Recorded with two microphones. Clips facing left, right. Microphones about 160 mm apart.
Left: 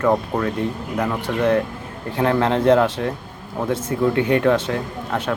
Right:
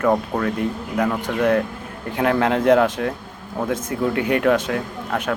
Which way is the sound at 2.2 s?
25° left (ahead or behind).